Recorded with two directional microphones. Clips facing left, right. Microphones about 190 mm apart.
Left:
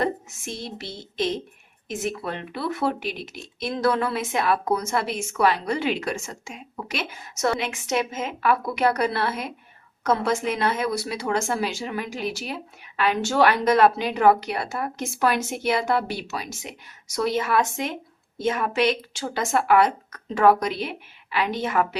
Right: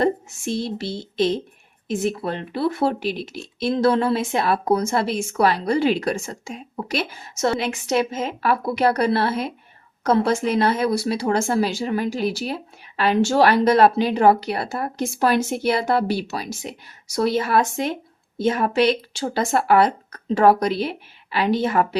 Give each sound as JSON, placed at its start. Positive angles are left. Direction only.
{"t": 0.0, "sound": "a woman's voice", "side_deg": -30}